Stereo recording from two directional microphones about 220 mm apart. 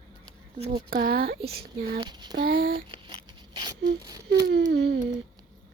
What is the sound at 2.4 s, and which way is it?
Speech, 40° right (ahead or behind).